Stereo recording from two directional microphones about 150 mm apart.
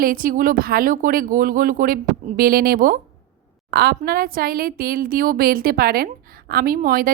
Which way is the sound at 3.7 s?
90° right.